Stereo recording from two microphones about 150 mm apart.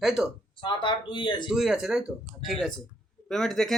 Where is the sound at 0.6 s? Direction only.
30° left (ahead or behind).